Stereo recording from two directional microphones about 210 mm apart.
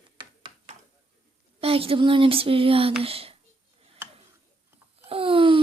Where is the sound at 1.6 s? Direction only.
25° right (ahead or behind).